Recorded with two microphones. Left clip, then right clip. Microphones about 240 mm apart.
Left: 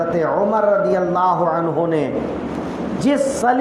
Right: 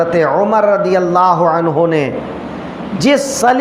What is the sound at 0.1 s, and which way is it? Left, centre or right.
A man's voice, right.